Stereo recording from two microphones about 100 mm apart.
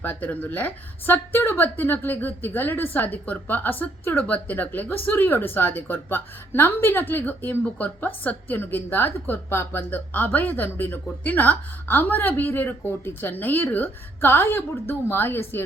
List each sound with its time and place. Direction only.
0.0 s a woman's voice: 20° left (ahead or behind)